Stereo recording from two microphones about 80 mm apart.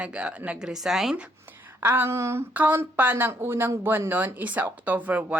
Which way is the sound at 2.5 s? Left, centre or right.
Right.